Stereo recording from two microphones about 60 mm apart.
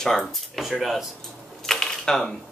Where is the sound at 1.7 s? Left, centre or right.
Centre.